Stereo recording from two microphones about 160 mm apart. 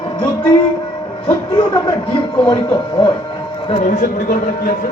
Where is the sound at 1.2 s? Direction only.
35° left (ahead or behind).